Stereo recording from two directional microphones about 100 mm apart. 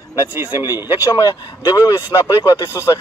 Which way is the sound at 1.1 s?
40° left (ahead or behind).